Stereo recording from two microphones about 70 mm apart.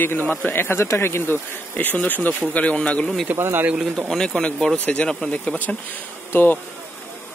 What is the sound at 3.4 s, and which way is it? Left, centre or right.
Speech, right.